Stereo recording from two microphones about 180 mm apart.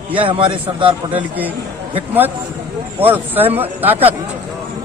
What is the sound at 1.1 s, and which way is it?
Speech, 10° right (ahead or behind).